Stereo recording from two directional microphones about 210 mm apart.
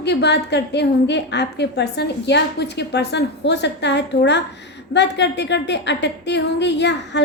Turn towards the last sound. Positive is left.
turn(degrees=55)  # may be behind; listen again after turning